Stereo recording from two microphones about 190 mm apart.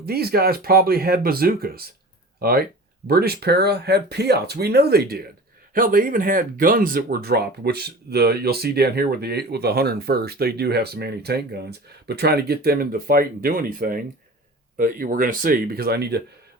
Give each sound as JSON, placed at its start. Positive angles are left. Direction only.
{"t": 0.0, "sound": "speech", "side_deg": -55}